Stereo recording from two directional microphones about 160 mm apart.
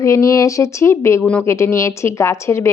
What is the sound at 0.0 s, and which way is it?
Speech, 20° left (ahead or behind).